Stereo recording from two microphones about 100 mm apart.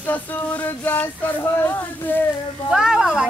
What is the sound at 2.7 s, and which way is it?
Speech, 5° right (ahead or behind).